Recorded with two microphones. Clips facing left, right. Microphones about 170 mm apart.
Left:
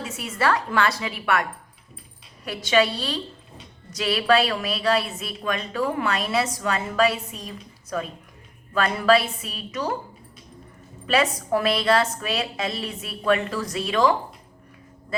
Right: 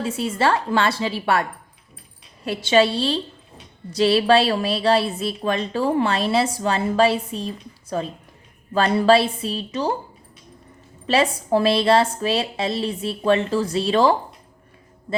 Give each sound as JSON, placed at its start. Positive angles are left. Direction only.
{"t": 0.0, "sound": "a woman's voice", "side_deg": -30}
{"t": 11.0, "sound": "a woman's voice", "side_deg": -30}